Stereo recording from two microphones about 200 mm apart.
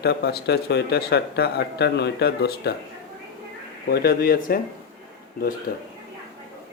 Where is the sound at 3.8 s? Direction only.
50° left (ahead or behind).